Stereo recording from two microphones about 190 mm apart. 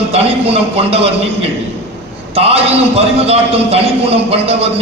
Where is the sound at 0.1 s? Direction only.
30° right (ahead or behind).